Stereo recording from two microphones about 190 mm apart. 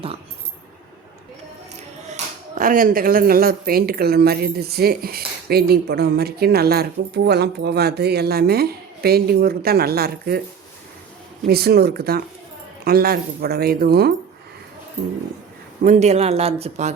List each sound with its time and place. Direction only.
2.0 s speech: 40° right (ahead or behind)
11.4 s speech: 55° right (ahead or behind)
15.8 s speech: 40° right (ahead or behind)